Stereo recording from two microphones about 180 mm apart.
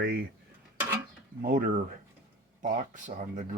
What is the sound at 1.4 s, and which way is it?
Speech, 50° right (ahead or behind).